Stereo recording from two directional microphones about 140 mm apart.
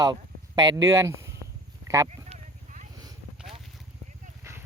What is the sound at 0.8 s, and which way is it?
Speech, 20° right (ahead or behind).